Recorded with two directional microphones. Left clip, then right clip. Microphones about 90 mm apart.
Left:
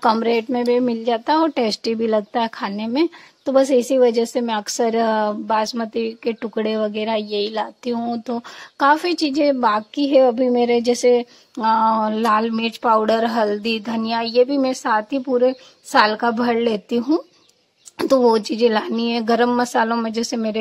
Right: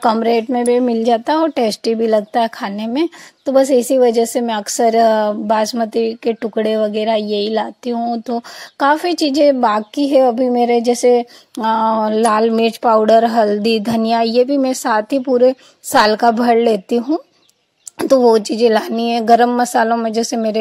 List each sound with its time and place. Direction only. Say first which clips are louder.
0.0 s speech: right 3 dB; 35° right (ahead or behind)